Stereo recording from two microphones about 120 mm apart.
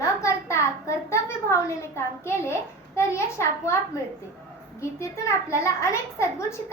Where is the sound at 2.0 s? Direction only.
20° left (ahead or behind).